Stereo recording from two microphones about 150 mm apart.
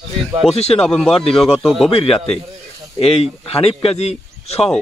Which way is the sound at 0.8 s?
5° left (ahead or behind).